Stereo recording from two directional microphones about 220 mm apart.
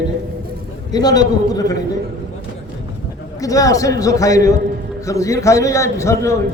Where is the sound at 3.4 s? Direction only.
15° left (ahead or behind).